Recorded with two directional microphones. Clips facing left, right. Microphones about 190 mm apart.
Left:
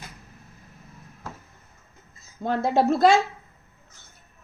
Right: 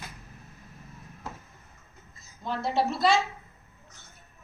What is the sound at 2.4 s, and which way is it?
Speech, 50° left (ahead or behind).